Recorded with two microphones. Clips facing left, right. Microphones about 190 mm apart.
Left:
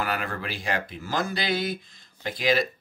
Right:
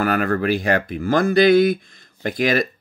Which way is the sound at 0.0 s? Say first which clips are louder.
Right 10 dB; 50° right (ahead or behind).